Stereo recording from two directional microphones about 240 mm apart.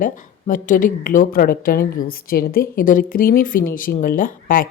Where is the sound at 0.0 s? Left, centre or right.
Left.